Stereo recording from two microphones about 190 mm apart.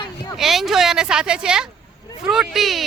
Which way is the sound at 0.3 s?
Centre (ahead or behind).